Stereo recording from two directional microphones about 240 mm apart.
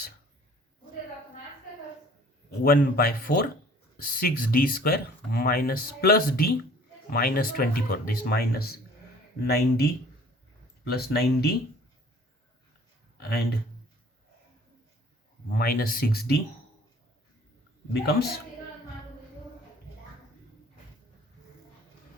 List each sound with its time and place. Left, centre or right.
2.5 s speech: left
13.1 s a sound: left
15.4 s speech: left
17.9 s speech: left